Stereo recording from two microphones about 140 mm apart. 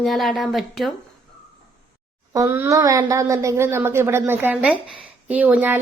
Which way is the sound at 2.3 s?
25° right (ahead or behind).